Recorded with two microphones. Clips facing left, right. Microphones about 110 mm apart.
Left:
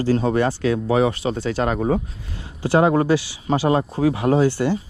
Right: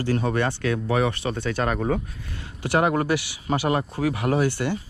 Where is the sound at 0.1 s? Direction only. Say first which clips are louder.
Left 5 dB; 25° left (ahead or behind).